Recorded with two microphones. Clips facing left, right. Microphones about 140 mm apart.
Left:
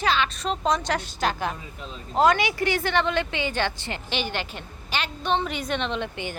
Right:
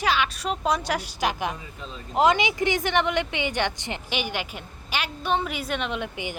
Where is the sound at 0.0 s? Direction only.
10° right (ahead or behind).